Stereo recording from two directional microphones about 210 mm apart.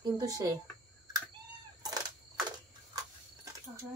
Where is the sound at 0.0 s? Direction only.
15° right (ahead or behind).